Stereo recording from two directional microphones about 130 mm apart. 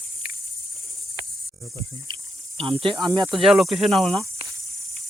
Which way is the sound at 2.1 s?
35° right (ahead or behind).